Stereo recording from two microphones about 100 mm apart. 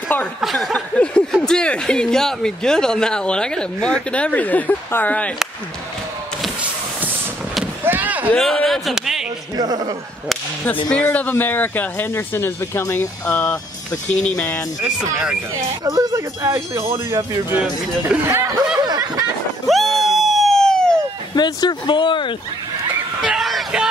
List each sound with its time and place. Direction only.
0.4 s speech: centre (ahead or behind); by 5.3 s 15° left (ahead or behind)
6.6 s vehicle: 15° right (ahead or behind)
7.8 s slam: 20° right (ahead or behind)
8.4 s speech: 5° left (ahead or behind)
9.6 s speech: 40° right (ahead or behind)
10.9 s speech: 15° left (ahead or behind)
14.3 s speech: 10° left (ahead or behind)
15.8 s speech: 40° right (ahead or behind)
17.6 s speech: 10° right (ahead or behind)
18.3 s snicker: 30° right (ahead or behind)
18.8 s a sound: 40° right (ahead or behind)
19.7 s a sound: centre (ahead or behind)
21.4 s speech: 45° left (ahead or behind)
23.2 s a sound: 5° right (ahead or behind)